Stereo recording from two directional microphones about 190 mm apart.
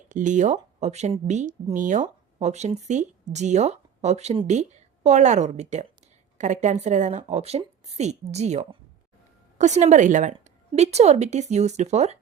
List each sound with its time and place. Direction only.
0.1 s a woman's voice: 40° right (ahead or behind)